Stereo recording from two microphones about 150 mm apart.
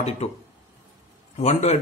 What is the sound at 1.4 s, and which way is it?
Speech, 50° left (ahead or behind).